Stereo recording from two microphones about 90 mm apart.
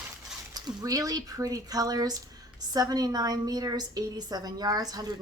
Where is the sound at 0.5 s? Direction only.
45° right (ahead or behind).